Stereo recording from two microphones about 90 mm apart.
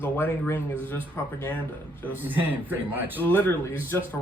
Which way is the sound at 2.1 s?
20° right (ahead or behind).